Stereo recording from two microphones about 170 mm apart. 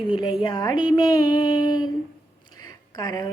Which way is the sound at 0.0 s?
30° left (ahead or behind).